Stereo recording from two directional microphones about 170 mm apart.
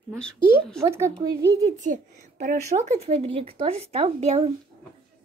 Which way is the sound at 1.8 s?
45° right (ahead or behind).